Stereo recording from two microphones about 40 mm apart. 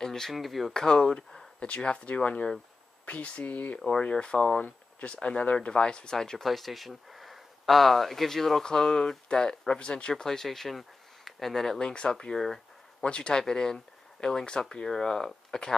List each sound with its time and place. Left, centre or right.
0.0 s a sound: centre
0.3 s speech: centre
0.7 s speech: centre; by 3.8 s left
4.0 s speech: left
5.7 s speech: left
6.1 s speech: centre
11.8 s speech: left